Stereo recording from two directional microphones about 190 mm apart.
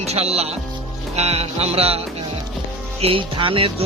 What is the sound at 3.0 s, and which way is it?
Music, 30° right (ahead or behind).